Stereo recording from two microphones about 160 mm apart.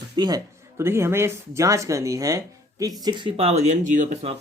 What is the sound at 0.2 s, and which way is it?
Speech, 25° right (ahead or behind).